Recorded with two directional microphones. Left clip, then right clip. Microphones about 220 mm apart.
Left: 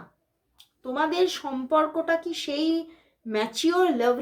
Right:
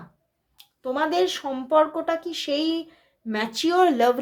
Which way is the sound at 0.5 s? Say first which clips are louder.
Right 2 dB; 30° right (ahead or behind).